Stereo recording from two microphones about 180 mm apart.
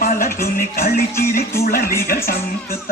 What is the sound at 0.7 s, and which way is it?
Music, 55° left (ahead or behind).